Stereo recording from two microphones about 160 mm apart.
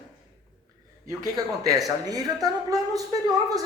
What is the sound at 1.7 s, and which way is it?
A man's voice, 20° right (ahead or behind).